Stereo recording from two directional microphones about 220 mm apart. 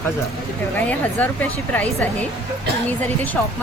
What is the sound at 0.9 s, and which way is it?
A woman's voice, 5° left (ahead or behind).